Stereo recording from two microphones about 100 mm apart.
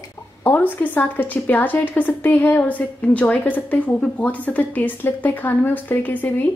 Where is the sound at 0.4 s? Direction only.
20° left (ahead or behind).